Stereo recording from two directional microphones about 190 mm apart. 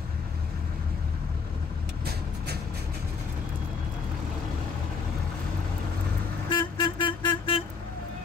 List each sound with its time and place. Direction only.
2.0 s vehicle: 60° right (ahead or behind)
6.5 s vehicle: 25° left (ahead or behind)